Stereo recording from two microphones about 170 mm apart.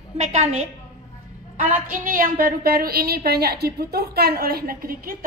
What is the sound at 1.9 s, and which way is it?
A woman's voice, 55° right (ahead or behind).